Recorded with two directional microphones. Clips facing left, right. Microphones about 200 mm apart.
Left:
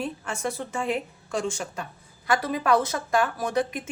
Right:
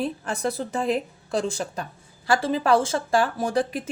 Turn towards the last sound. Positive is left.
turn(degrees=-30)  # may be behind; listen again after turning